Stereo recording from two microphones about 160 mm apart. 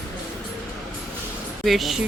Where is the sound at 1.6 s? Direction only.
Centre (ahead or behind).